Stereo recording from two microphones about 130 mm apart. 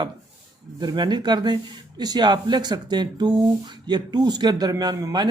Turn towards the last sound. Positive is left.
turn(degrees=-30)  # may be behind; listen again after turning